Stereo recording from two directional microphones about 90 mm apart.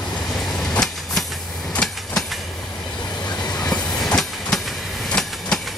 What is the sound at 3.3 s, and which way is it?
Train, 50° left (ahead or behind).